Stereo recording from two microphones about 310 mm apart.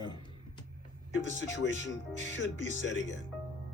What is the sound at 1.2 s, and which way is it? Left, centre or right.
Speech, left.